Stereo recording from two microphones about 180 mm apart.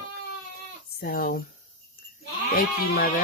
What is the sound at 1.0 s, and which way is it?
Speech, 55° left (ahead or behind).